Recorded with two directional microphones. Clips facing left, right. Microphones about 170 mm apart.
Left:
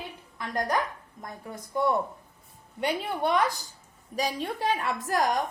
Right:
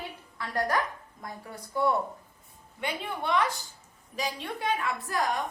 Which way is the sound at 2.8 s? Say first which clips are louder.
Left 5 dB; 40° left (ahead or behind).